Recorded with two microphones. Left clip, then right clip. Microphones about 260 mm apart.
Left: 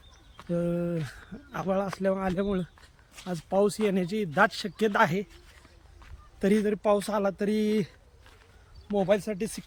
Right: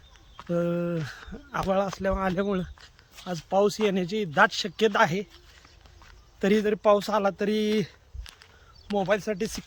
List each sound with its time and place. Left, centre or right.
0.3 s a man's voice: centre
3.2 s speech: right
3.5 s speech: centre
6.4 s a man's voice: centre
9.0 s a man's voice: centre